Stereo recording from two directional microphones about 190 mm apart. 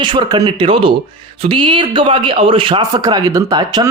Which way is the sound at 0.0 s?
25° right (ahead or behind).